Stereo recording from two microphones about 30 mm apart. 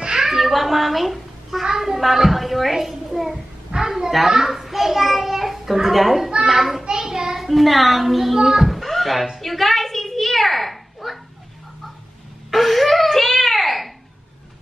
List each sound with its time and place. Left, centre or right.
0.0 s child singing: right
0.3 s a child's voice: centre
1.6 s a child's voice: centre
2.3 s a woman's voice: centre
3.7 s a woman's voice: right
4.2 s a woman's voice: centre
6.9 s hands: right
7.3 s a woman's voice: centre
8.8 s music: centre
9.4 s a sound: centre
12.4 s a sound: centre